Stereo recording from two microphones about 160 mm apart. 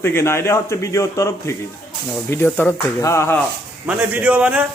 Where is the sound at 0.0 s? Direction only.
15° left (ahead or behind).